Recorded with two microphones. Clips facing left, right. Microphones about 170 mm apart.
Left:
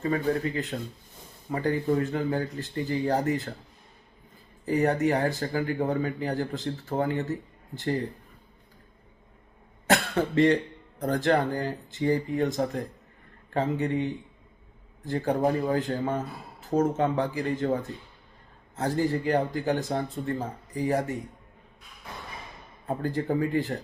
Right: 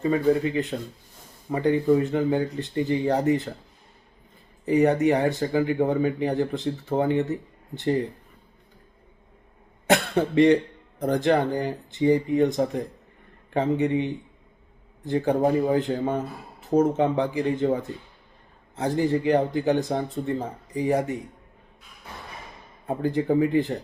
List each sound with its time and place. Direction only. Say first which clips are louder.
0.0 s speech: right 5 dB; 15° right (ahead or behind)
4.6 s speech: right 4 dB; 20° right (ahead or behind)
9.9 s speech: right 3 dB; 20° right (ahead or behind)
18.8 s speech: right 3 dB; 20° right (ahead or behind)
22.9 s speech: right 4 dB; 20° right (ahead or behind)